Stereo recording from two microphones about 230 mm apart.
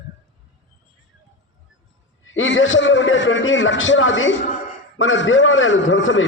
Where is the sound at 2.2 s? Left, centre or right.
Left.